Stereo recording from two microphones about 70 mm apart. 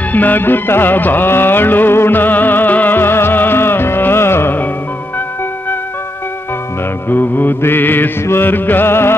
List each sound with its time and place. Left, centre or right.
0.1 s music: left
7.1 s mantra: left